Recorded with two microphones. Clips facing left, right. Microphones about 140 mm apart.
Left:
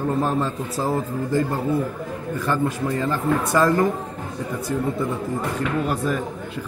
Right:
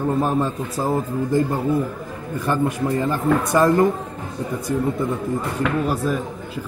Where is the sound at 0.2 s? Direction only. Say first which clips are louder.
Right 2 dB; 15° right (ahead or behind).